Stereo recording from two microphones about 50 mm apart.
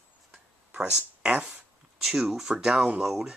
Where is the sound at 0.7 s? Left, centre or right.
Centre.